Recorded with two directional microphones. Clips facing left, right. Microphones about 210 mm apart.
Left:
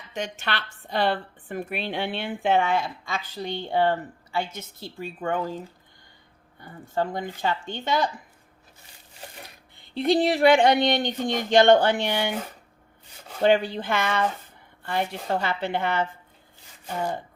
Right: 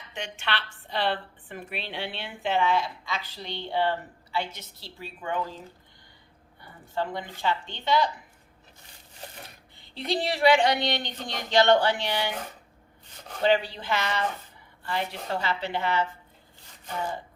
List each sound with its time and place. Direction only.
0.1 s speech: 40° left (ahead or behind)
6.6 s speech: 45° left (ahead or behind)
9.7 s speech: 55° left (ahead or behind)
13.4 s speech: 50° left (ahead or behind)